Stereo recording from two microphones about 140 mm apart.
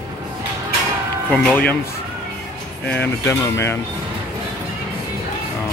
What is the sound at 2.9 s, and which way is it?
Speech, 15° left (ahead or behind).